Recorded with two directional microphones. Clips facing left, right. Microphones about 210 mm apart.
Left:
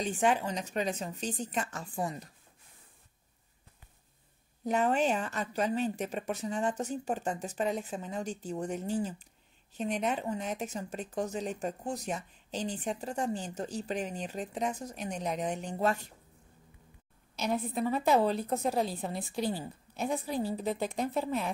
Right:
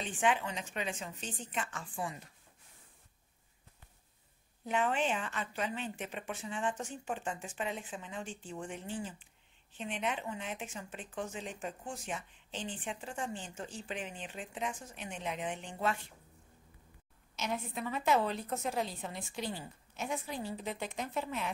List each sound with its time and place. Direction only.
0.0 s a woman's voice: 40° left (ahead or behind)
4.6 s a woman's voice: 40° left (ahead or behind)
17.4 s a woman's voice: 35° left (ahead or behind)